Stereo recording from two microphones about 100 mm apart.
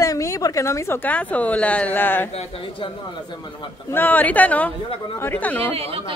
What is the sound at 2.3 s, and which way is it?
Speech, 60° left (ahead or behind).